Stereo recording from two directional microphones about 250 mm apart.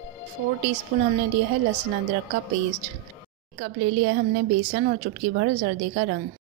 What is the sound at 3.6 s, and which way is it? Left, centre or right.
Speech, right.